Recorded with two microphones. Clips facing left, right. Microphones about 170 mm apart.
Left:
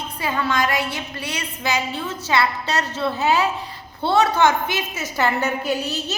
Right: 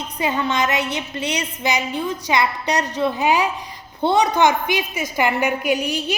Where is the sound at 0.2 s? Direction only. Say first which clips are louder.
Right 2 dB; 20° right (ahead or behind).